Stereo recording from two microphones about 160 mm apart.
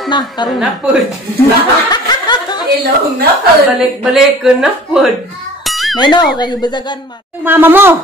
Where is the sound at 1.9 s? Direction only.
25° left (ahead or behind).